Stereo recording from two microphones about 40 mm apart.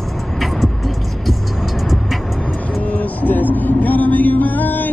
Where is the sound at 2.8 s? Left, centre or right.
Left.